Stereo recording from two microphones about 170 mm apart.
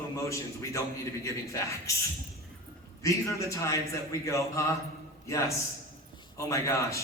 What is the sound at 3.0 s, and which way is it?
A man's voice, 20° left (ahead or behind).